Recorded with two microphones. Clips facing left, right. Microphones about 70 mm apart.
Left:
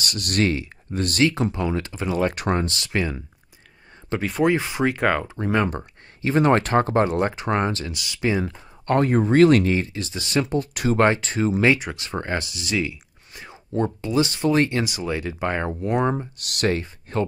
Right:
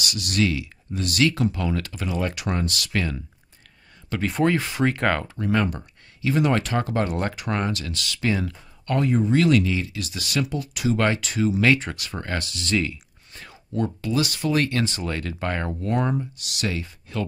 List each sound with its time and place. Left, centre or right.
0.0 s speech: left
1.2 s speech: left
2.3 s speech: left
4.2 s speech: centre
4.6 s speech: left
4.8 s speech: centre
5.3 s speech: left
5.7 s speech: left
8.8 s speech: left
10.5 s speech: left
11.0 s speech: left
11.6 s speech: left
13.7 s speech: left
16.3 s speech: left